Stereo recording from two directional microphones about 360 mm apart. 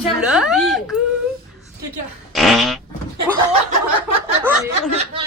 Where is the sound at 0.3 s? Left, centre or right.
Centre.